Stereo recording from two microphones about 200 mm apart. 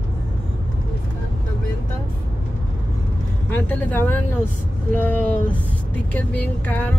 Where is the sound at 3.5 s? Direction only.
10° left (ahead or behind).